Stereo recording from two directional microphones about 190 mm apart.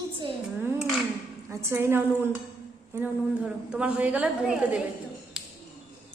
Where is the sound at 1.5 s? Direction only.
10° right (ahead or behind).